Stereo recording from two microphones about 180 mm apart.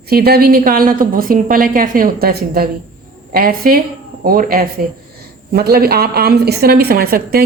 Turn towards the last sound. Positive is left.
turn(degrees=-55)  # may be behind; listen again after turning